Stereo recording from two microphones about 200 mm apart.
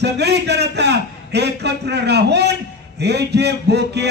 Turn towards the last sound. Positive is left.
turn(degrees=-55)  # may be behind; listen again after turning